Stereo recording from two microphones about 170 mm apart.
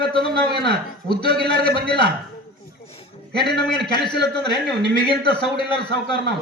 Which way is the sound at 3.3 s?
75° right (ahead or behind).